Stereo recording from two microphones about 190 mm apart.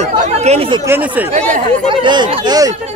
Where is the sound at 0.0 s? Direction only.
35° right (ahead or behind).